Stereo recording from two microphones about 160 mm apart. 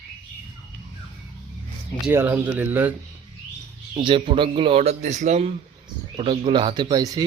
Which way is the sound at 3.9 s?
30° right (ahead or behind).